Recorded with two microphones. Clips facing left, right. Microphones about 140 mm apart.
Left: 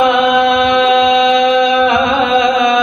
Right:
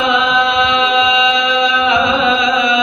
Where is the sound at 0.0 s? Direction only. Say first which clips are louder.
Left 4 dB; 55° left (ahead or behind).